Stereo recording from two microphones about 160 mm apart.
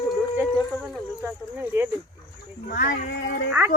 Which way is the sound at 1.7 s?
15° right (ahead or behind).